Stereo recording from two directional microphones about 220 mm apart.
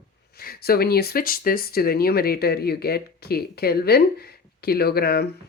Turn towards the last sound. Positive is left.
turn(degrees=45)  # may be behind; listen again after turning